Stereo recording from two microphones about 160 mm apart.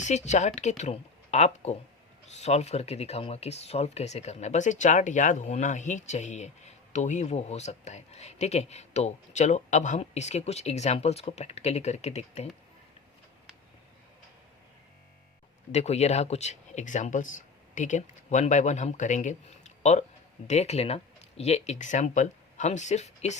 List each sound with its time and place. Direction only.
0.0 s speech: 45° left (ahead or behind)
15.7 s speech: 45° left (ahead or behind)